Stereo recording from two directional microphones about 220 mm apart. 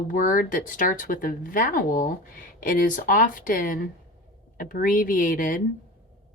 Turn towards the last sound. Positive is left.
turn(degrees=35)  # may be behind; listen again after turning